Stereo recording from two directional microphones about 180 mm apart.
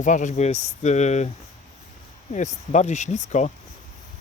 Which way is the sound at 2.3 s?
40° left (ahead or behind).